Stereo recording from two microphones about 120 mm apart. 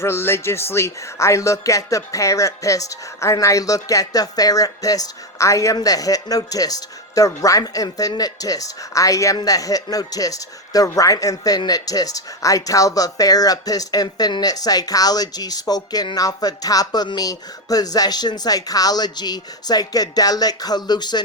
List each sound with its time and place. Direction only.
0.0 s speech: 20° left (ahead or behind); by 21.2 s 35° left (ahead or behind)